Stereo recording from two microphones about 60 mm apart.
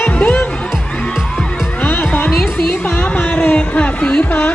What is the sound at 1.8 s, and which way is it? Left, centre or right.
Music, left.